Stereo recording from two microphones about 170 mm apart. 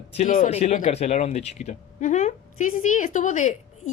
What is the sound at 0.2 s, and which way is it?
A woman's voice, 50° left (ahead or behind).